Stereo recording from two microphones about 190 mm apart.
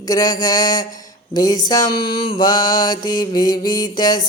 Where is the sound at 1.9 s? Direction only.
55° left (ahead or behind).